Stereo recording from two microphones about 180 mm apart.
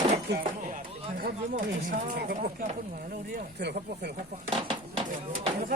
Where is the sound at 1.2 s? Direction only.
50° right (ahead or behind).